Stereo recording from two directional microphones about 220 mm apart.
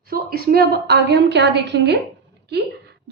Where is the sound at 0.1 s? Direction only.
45° right (ahead or behind).